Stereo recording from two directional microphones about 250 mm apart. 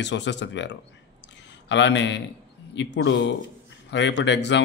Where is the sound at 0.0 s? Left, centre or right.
Left.